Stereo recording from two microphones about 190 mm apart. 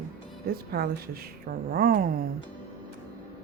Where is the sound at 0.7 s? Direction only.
55° right (ahead or behind).